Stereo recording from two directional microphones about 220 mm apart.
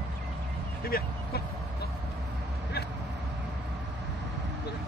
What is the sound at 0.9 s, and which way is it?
Speech, 45° left (ahead or behind).